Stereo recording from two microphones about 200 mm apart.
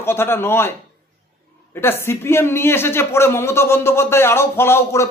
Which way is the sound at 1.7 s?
10° left (ahead or behind).